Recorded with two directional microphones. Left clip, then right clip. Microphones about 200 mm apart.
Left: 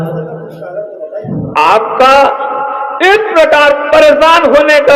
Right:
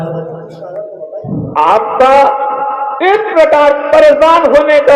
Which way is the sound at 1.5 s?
30° left (ahead or behind).